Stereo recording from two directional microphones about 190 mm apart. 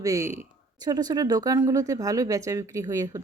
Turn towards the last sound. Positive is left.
turn(degrees=-15)  # may be behind; listen again after turning